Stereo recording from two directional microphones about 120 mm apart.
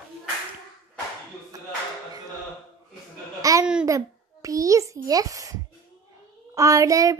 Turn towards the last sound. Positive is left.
turn(degrees=-30)  # may be behind; listen again after turning